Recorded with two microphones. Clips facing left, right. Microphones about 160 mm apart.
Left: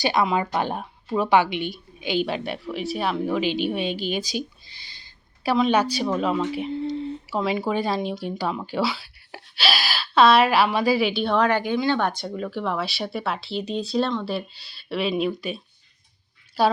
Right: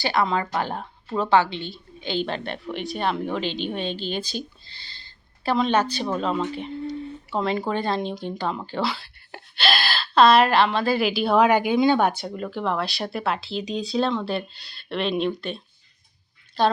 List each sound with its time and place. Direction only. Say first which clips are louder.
0.0 s a woman's voice: left 1 dB; 15° left (ahead or behind)
6.8 s a sound: left 3 dB; 30° left (ahead or behind)
7.3 s a woman's voice: even; 5° left (ahead or behind)